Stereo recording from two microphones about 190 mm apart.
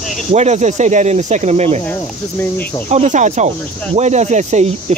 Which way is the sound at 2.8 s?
40° right (ahead or behind).